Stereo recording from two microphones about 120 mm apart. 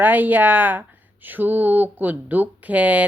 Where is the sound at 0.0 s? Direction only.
15° right (ahead or behind).